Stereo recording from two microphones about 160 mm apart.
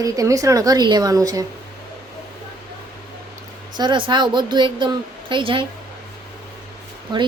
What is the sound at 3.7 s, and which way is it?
A woman's voice, 30° right (ahead or behind).